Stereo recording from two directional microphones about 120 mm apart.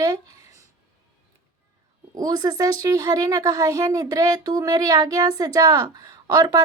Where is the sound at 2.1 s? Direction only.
30° right (ahead or behind).